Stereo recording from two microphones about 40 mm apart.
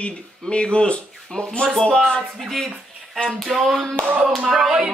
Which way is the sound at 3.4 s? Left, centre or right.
Centre.